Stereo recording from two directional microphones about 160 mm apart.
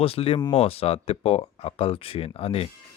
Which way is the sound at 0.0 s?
35° left (ahead or behind).